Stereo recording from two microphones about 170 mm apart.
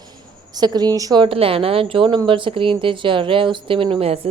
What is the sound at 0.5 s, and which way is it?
Speech, 25° right (ahead or behind).